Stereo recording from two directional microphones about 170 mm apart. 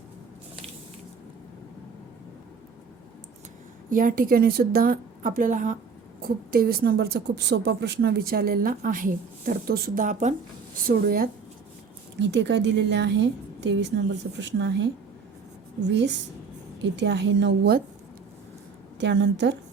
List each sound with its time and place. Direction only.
3.8 s a woman's voice: 55° right (ahead or behind)
6.2 s a woman's voice: 60° right (ahead or behind); by 10.3 s 45° right (ahead or behind)
10.8 s a woman's voice: 60° right (ahead or behind)
12.2 s a woman's voice: 90° right
15.9 s a woman's voice: 90° right; by 17.8 s 70° right (ahead or behind)
18.9 s a woman's voice: 90° right